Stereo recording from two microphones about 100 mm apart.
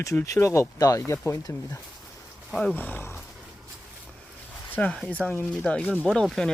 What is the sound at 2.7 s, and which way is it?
Speech, 20° left (ahead or behind).